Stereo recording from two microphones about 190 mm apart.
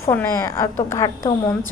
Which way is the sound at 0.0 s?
10° left (ahead or behind).